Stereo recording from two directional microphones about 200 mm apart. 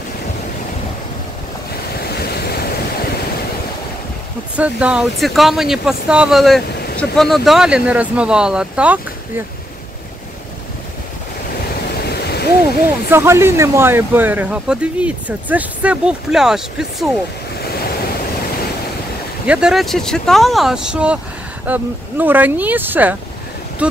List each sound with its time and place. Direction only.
2.0 s waves: 50° left (ahead or behind)
4.6 s speech: 5° right (ahead or behind)
12.0 s a sound: 55° left (ahead or behind)
13.1 s speech: 10° right (ahead or behind)
17.6 s waves: 50° left (ahead or behind)
19.4 s speech: 5° right (ahead or behind)